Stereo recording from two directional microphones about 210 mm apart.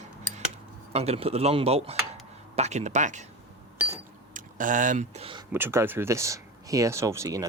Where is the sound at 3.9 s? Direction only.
40° right (ahead or behind).